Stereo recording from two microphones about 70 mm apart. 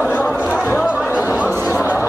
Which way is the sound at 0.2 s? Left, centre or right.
Left.